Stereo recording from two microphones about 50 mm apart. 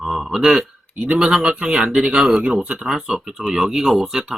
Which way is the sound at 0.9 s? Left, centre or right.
Centre.